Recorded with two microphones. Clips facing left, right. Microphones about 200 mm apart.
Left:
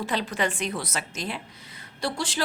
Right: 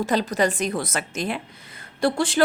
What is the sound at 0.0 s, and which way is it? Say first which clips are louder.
A woman's voice: right 6 dB; 45° right (ahead or behind).